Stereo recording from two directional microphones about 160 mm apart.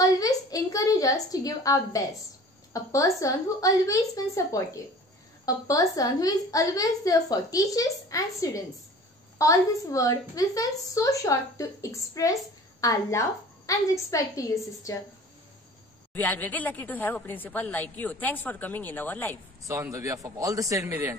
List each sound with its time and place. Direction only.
0.0 s a sound: 20° left (ahead or behind)
2.7 s a woman's voice: 20° left (ahead or behind)
16.1 s a woman's voice: 10° left (ahead or behind)
19.6 s speech: 20° right (ahead or behind)